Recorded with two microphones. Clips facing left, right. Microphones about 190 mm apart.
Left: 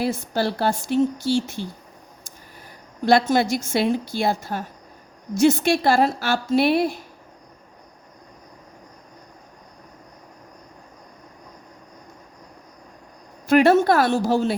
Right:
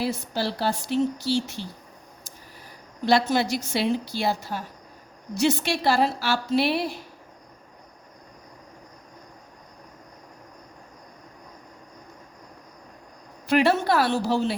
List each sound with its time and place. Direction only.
0.0 s a woman's voice: 50° left (ahead or behind)
3.1 s a woman's voice: 50° left (ahead or behind)
13.5 s a woman's voice: 50° left (ahead or behind)